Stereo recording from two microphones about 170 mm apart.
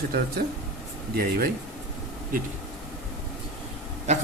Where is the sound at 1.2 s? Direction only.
65° right (ahead or behind).